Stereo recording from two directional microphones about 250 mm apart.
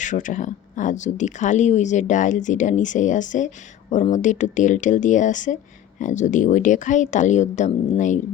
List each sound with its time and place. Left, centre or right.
0.0 s speech: left